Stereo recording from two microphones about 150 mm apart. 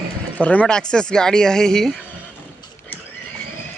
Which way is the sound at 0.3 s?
10° left (ahead or behind).